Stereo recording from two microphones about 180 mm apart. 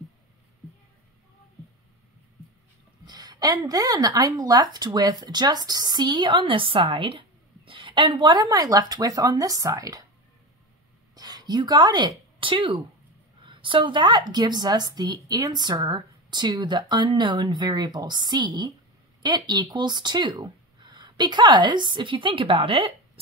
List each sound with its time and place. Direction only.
3.1 s a woman's voice: 20° right (ahead or behind)
11.1 s a woman's voice: 20° right (ahead or behind)